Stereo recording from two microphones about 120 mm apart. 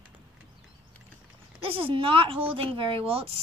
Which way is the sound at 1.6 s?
50° right (ahead or behind).